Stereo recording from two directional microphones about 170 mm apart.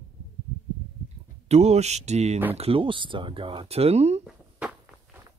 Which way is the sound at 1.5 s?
40° right (ahead or behind).